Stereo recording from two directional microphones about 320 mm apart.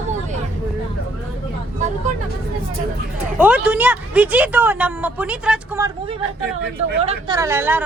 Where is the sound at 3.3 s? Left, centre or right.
Centre.